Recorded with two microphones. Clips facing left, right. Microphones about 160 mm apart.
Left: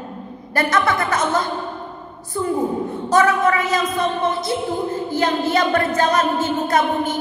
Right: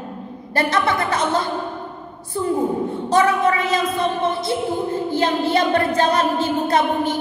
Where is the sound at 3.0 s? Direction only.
30° right (ahead or behind).